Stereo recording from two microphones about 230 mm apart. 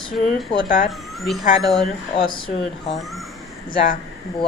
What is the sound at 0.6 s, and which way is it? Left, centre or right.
Speech, left.